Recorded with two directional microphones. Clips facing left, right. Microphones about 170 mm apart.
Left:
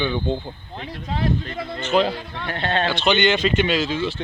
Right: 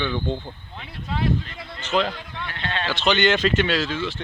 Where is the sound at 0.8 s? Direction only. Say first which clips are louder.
Left 1 dB; 40° left (ahead or behind).